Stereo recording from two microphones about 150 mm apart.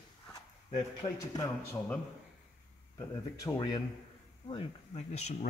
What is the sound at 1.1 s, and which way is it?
Speech, 25° left (ahead or behind).